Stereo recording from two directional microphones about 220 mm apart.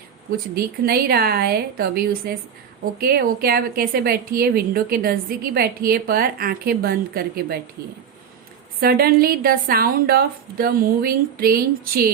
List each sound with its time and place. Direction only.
0.3 s a woman's voice: 45° right (ahead or behind)
8.8 s a woman's voice: 45° right (ahead or behind)